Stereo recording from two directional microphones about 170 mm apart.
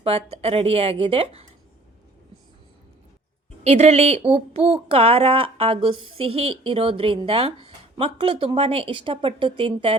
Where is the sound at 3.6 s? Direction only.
40° right (ahead or behind).